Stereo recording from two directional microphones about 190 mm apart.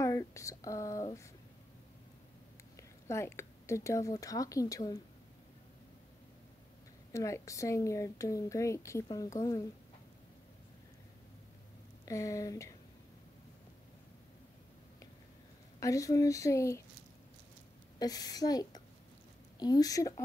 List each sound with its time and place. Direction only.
0.0 s speech: 15° left (ahead or behind)
3.1 s speech: 15° left (ahead or behind)
7.1 s speech: 15° left (ahead or behind)
12.1 s speech: 15° left (ahead or behind)
15.8 s speech: 15° left (ahead or behind)
17.9 s a woman's voice: 20° left (ahead or behind)